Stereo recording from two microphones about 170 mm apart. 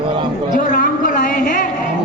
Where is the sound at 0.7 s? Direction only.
50° left (ahead or behind).